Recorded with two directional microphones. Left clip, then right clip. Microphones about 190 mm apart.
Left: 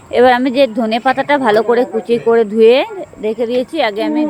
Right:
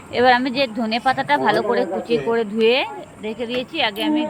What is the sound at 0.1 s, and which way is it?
A woman's voice, 45° left (ahead or behind).